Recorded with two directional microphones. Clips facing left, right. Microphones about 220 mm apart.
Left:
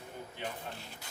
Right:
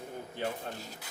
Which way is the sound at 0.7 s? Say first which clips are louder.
Right 4 dB; 40° right (ahead or behind).